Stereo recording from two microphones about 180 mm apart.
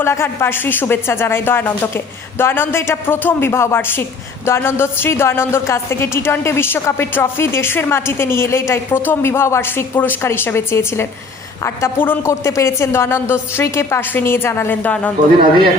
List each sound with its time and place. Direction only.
0.0 s a woman's voice: 15° left (ahead or behind)